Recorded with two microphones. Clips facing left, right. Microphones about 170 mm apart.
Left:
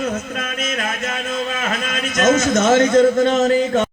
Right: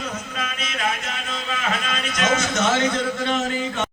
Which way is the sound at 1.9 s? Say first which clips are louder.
Left 9 dB; 45° left (ahead or behind).